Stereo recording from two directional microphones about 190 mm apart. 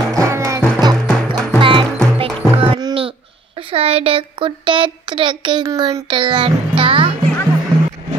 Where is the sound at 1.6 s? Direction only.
25° right (ahead or behind).